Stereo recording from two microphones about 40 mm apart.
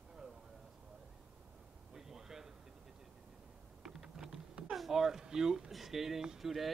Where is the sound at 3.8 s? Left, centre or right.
Centre.